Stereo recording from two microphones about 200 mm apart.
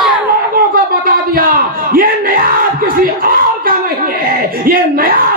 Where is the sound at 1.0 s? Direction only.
45° right (ahead or behind).